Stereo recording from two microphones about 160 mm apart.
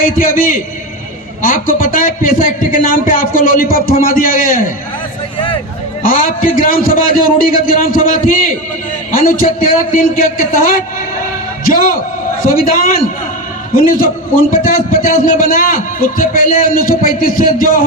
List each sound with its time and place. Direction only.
0.0 s a man's voice: 60° left (ahead or behind)
6.1 s a man's voice: 55° left (ahead or behind)
12.4 s a man's voice: 60° left (ahead or behind)